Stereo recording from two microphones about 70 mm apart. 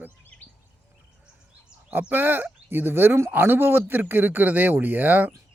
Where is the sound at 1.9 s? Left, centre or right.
Right.